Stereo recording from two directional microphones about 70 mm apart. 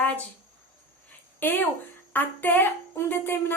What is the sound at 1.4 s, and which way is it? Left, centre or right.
A woman's voice, left.